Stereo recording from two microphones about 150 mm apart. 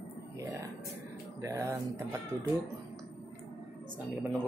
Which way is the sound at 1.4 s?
20° right (ahead or behind).